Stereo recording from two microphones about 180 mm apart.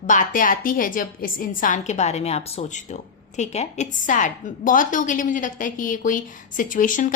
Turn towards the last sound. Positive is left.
turn(degrees=45)  # may be behind; listen again after turning